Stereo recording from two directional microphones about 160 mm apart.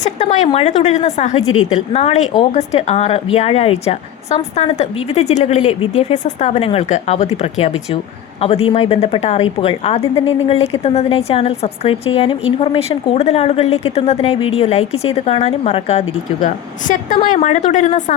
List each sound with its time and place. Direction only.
0.0 s a woman's voice: 45° left (ahead or behind)